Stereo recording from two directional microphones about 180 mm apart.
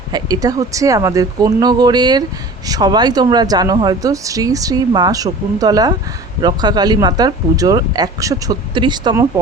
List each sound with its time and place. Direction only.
0.1 s speech: 20° right (ahead or behind)